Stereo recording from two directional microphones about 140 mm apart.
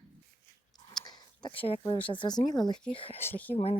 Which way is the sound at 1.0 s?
30° left (ahead or behind).